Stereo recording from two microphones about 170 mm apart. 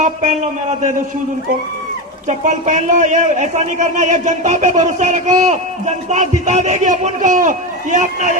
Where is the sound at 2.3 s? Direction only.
45° right (ahead or behind).